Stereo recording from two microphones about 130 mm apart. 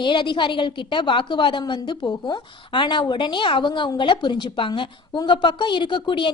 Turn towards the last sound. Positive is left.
turn(degrees=40)  # may be behind; listen again after turning